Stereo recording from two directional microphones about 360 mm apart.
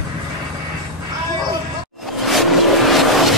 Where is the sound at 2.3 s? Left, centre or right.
Centre.